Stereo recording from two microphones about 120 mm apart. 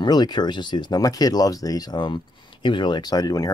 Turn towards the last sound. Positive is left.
turn(degrees=30)  # may be behind; listen again after turning